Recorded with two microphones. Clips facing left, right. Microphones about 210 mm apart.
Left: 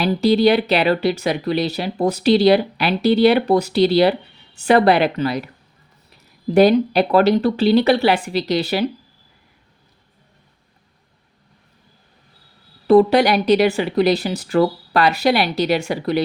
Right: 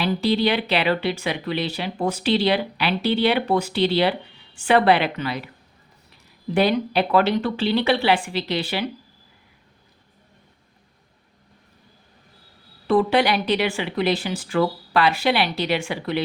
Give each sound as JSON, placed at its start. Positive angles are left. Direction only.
{"t": 0.0, "sound": "speech", "side_deg": 40}
{"t": 6.5, "sound": "speech", "side_deg": 40}
{"t": 12.9, "sound": "speech", "side_deg": 40}